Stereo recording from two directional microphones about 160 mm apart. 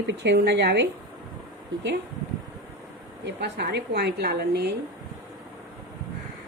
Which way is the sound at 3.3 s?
90° right.